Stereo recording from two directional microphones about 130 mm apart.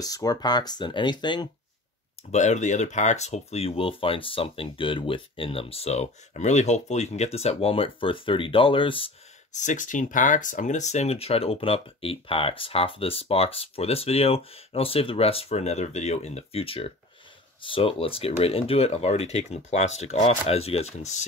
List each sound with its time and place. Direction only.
0.0 s speech: 30° left (ahead or behind)
2.3 s speech: 65° left (ahead or behind); by 9.1 s 40° left (ahead or behind)
9.6 s speech: 75° left (ahead or behind)